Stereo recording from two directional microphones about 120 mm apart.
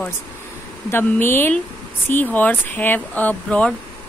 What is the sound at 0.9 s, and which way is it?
Speech, 20° left (ahead or behind).